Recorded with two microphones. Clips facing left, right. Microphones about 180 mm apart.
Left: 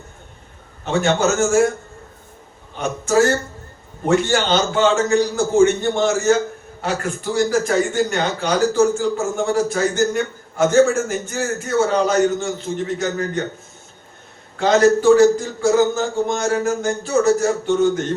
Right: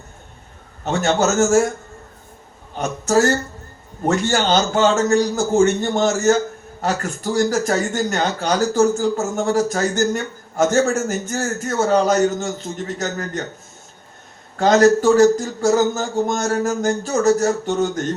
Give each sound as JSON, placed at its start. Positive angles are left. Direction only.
{"t": 1.4, "sound": "speech", "side_deg": -40}
{"t": 3.1, "sound": "a man's voice", "side_deg": -40}
{"t": 14.5, "sound": "speech", "side_deg": -40}